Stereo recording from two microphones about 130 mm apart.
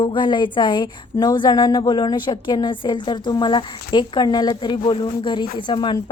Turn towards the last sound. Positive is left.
turn(degrees=40)  # may be behind; listen again after turning